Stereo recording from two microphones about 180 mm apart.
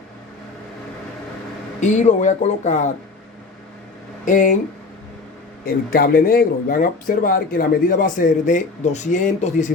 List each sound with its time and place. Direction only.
1.8 s speech: 40° left (ahead or behind)
4.3 s speech: 50° left (ahead or behind)
5.6 s speech: 55° left (ahead or behind)